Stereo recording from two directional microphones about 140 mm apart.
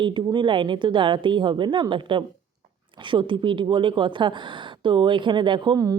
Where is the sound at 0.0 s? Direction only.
35° right (ahead or behind).